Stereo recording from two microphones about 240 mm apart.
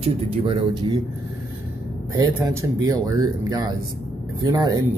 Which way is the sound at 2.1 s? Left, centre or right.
Centre.